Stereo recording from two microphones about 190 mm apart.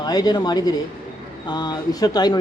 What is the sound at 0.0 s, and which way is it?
A man's voice, 20° left (ahead or behind).